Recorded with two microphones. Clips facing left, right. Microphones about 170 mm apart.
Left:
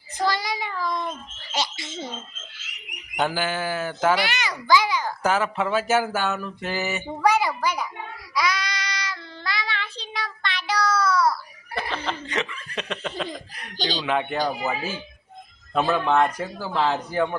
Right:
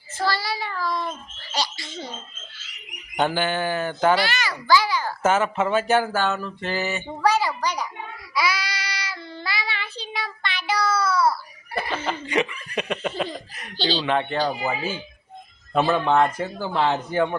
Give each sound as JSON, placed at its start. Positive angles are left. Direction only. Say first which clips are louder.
{"t": 0.2, "sound": "child singing", "louder": "even", "side_deg": 20}
{"t": 1.5, "sound": "a sound", "louder": "even", "side_deg": 20}
{"t": 3.2, "sound": "speech", "louder": "right 2 dB", "side_deg": 5}
{"t": 4.2, "sound": "a child's voice", "louder": "right 1 dB", "side_deg": 20}
{"t": 4.7, "sound": "babbling", "louder": "even", "side_deg": 20}
{"t": 5.0, "sound": "speech", "louder": "right 2 dB", "side_deg": 0}
{"t": 8.4, "sound": "child singing", "louder": "even", "side_deg": -5}
{"t": 11.8, "sound": "speech", "louder": "right 2 dB", "side_deg": -5}
{"t": 13.7, "sound": "speech", "louder": "right 2 dB", "side_deg": 10}
{"t": 15.7, "sound": "speech", "louder": "right 1 dB", "side_deg": -5}